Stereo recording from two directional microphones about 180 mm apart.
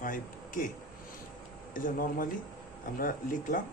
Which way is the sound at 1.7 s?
50° left (ahead or behind).